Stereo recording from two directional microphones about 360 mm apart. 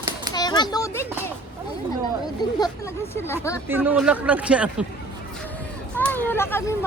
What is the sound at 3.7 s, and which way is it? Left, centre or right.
Speech, centre.